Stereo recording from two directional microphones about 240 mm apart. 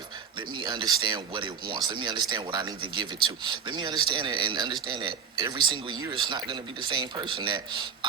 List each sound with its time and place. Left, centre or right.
0.3 s speech: centre